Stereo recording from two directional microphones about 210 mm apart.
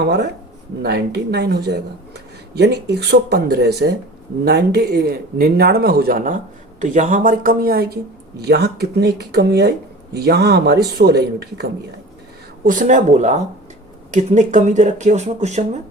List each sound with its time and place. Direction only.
0.0 s speech: 55° right (ahead or behind)
12.6 s speech: 40° right (ahead or behind)